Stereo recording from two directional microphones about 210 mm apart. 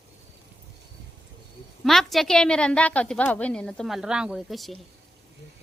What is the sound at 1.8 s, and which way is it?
A woman's voice, centre (ahead or behind).